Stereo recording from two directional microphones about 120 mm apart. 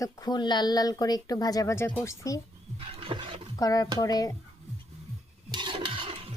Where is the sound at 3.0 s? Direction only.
45° right (ahead or behind).